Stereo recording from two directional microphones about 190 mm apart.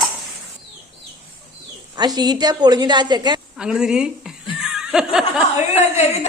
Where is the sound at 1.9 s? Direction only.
20° right (ahead or behind).